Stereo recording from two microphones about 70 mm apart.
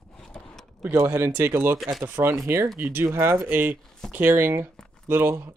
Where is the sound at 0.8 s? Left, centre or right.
Right.